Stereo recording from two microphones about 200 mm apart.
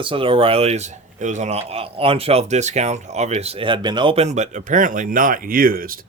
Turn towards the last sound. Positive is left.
turn(degrees=-45)  # may be behind; listen again after turning